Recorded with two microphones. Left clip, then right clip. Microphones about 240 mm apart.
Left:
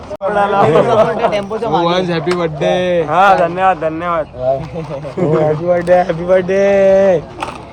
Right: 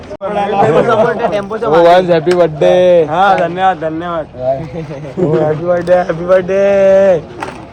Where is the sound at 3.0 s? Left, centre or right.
Left.